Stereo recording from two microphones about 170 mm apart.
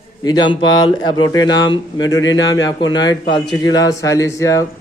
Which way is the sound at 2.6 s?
25° left (ahead or behind).